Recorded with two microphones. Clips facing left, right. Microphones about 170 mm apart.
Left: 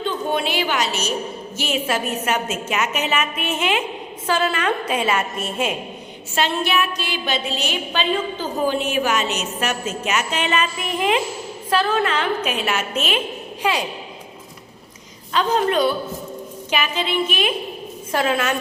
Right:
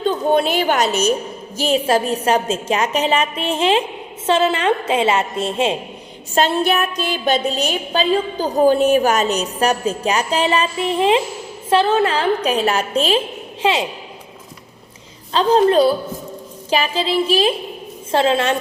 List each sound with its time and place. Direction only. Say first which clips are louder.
0.0 s a woman's voice: right 6 dB; 40° right (ahead or behind)
6.3 s a woman's voice: right 4 dB; 40° right (ahead or behind); by 13.8 s 25° right (ahead or behind)
15.3 s a woman's voice: right 6 dB; 30° right (ahead or behind)